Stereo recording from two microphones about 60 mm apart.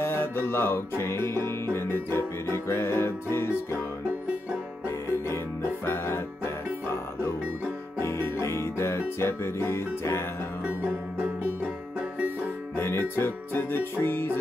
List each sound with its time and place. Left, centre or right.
0.0 s music: left
4.8 s music: left
12.7 s music: left